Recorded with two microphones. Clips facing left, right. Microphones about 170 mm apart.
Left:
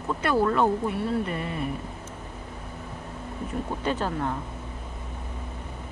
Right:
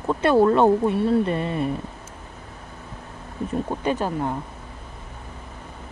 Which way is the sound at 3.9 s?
15° right (ahead or behind).